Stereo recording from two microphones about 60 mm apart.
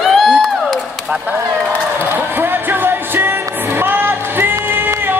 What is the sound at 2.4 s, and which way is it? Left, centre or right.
Music, right.